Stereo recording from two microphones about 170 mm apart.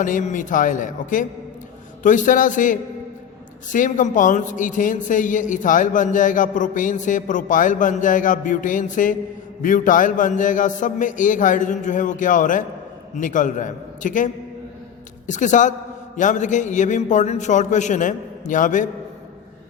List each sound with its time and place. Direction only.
0.0 s a man's voice: 50° left (ahead or behind)
15.3 s a man's voice: 45° left (ahead or behind)